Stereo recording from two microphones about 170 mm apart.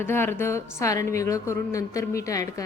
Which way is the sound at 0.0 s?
15° left (ahead or behind).